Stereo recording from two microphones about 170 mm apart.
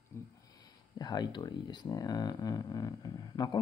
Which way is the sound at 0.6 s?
25° left (ahead or behind).